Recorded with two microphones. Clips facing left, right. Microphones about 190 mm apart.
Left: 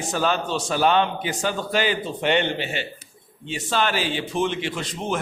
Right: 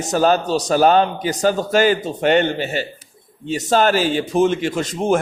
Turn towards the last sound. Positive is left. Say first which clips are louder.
# right 9 dB
turn(degrees=-45)  # may be behind; listen again after turning